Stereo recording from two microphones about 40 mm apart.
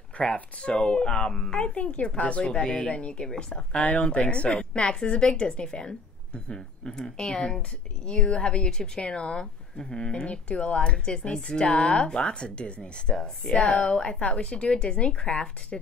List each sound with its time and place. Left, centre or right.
0.2 s a woman's voice: left
3.8 s a woman's voice: left